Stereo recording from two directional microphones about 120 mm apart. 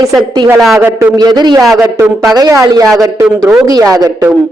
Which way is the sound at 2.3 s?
30° right (ahead or behind).